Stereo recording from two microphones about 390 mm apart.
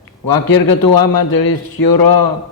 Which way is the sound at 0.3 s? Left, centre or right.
Left.